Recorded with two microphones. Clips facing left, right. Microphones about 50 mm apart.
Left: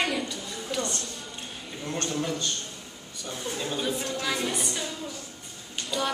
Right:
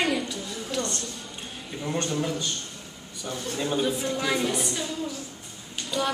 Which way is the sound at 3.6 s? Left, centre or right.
Centre.